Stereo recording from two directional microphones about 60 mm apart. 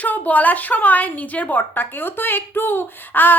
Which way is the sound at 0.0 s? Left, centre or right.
Left.